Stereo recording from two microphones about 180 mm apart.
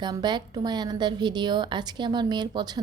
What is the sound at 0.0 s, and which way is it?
A woman's voice, 25° right (ahead or behind).